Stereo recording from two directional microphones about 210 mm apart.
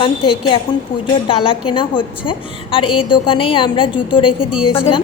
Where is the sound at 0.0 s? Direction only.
25° left (ahead or behind).